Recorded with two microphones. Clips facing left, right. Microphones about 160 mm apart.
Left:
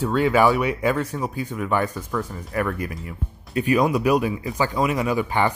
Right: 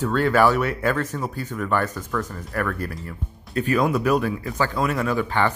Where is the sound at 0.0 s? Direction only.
10° left (ahead or behind).